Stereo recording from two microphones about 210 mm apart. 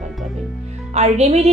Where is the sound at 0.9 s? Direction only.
30° right (ahead or behind).